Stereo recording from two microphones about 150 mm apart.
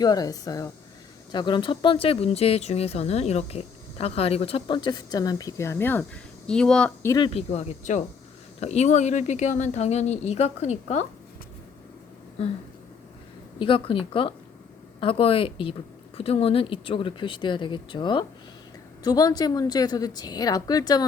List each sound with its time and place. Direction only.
0.0 s a woman's voice: 25° left (ahead or behind); by 6.9 s 5° left (ahead or behind)
7.0 s a woman's voice: 20° left (ahead or behind)
7.3 s speech: 45° left (ahead or behind)
12.4 s speech: 40° left (ahead or behind)
13.6 s a woman's voice: 35° left (ahead or behind)